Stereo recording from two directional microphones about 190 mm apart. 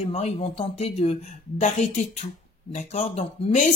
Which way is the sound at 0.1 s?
30° left (ahead or behind).